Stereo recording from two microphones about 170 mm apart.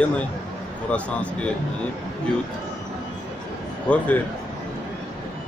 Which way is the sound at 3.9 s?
10° left (ahead or behind).